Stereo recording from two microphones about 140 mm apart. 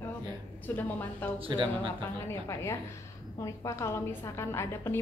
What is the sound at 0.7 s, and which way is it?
Speech, 10° left (ahead or behind).